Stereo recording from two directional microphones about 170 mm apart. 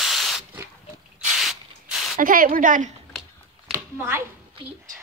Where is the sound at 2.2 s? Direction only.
55° right (ahead or behind).